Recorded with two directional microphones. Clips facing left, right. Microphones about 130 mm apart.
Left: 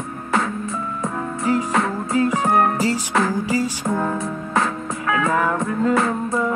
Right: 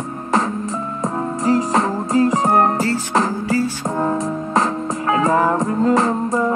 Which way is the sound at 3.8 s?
30° right (ahead or behind).